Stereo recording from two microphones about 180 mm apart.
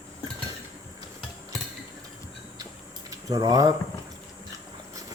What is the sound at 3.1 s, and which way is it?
Speech, 20° right (ahead or behind).